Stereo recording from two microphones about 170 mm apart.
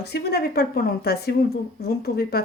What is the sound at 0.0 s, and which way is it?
Speech, 70° left (ahead or behind).